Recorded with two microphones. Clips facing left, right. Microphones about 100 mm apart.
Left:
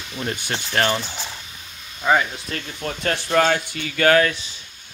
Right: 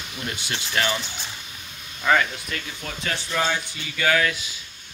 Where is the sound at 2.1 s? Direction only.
15° left (ahead or behind).